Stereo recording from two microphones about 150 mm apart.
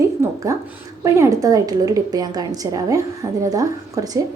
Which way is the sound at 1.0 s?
20° right (ahead or behind).